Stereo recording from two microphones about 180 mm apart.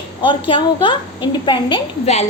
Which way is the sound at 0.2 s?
25° left (ahead or behind).